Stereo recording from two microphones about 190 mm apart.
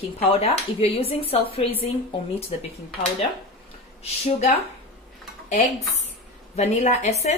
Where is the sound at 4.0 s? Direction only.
35° left (ahead or behind).